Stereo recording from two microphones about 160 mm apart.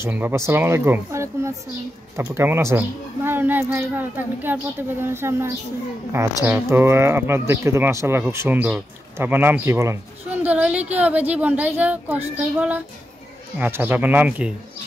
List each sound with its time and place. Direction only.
0.0 s speech: 15° right (ahead or behind)